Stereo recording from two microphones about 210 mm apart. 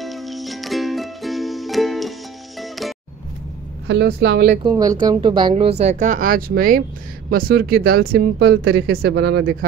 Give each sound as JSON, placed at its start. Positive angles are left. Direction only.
{"t": 0.0, "sound": "music", "side_deg": 0}
{"t": 3.8, "sound": "speech", "side_deg": -55}
{"t": 4.6, "sound": "speech", "side_deg": -20}
{"t": 8.7, "sound": "speech", "side_deg": -60}